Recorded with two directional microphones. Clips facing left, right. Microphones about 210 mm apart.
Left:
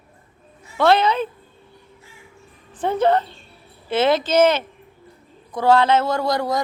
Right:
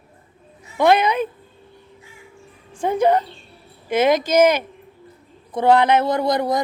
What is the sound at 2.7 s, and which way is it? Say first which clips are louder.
A woman's voice: right 1 dB; 10° right (ahead or behind).